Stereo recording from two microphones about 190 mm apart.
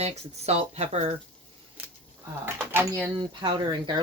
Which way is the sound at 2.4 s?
10° right (ahead or behind).